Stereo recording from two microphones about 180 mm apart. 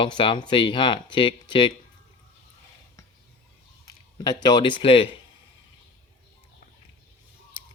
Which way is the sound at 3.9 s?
20° left (ahead or behind).